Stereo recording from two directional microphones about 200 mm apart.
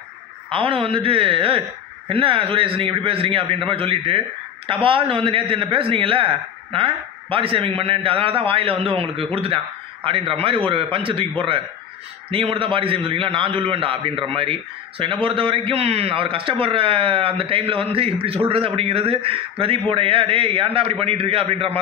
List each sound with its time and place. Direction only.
0.5 s a man's voice: 25° right (ahead or behind)